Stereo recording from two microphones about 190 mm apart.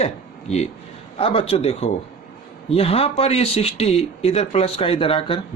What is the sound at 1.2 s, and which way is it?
Speech, 30° left (ahead or behind).